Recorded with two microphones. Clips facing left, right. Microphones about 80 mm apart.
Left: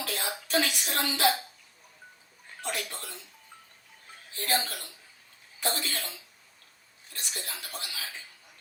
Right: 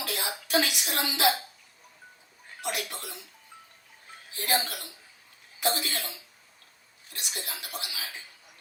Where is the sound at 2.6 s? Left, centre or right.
Centre.